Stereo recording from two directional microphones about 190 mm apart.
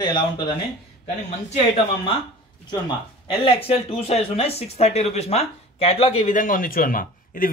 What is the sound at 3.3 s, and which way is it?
Speech, 30° left (ahead or behind).